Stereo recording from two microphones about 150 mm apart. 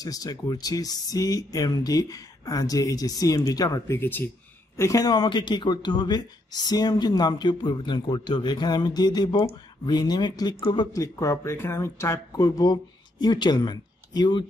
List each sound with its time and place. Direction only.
0.0 s speech: 25° left (ahead or behind)